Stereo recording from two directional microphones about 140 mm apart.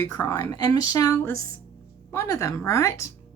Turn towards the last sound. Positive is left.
turn(degrees=20)  # may be behind; listen again after turning